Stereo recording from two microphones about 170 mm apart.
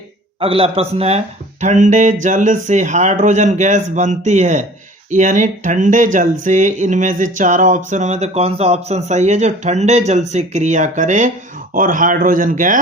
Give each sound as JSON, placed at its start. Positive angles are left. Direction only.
{"t": 0.3, "sound": "a man's voice", "side_deg": -35}
{"t": 1.6, "sound": "speech", "side_deg": -45}